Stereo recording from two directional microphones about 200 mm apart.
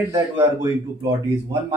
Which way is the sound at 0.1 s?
15° right (ahead or behind).